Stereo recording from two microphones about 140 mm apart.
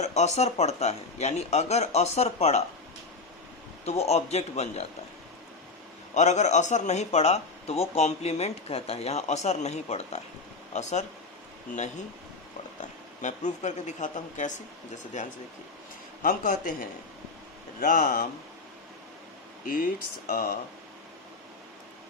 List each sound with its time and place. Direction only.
0.0 s a man's voice: 50° left (ahead or behind)
3.8 s a man's voice: 50° left (ahead or behind)
6.1 s a man's voice: 55° left (ahead or behind)
13.2 s speech: 55° left (ahead or behind)
16.2 s a man's voice: 75° left (ahead or behind)
17.7 s speech: 75° left (ahead or behind)
19.6 s speech: 80° left